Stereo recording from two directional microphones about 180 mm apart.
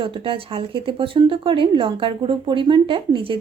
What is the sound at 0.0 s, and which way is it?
Speech, 30° right (ahead or behind).